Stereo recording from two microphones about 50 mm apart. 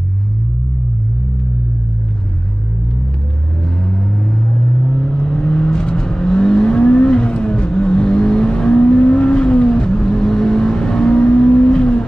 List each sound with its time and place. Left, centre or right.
3.8 s vehicle: centre